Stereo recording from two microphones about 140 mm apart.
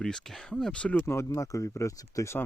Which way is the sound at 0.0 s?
5° left (ahead or behind).